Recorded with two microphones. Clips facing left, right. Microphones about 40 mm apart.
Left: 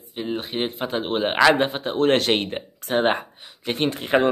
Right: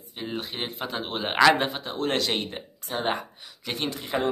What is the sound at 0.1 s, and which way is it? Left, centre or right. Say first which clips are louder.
Speech: left 6 dB; centre.